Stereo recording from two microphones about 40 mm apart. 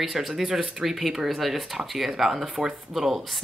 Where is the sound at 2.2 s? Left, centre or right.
Centre.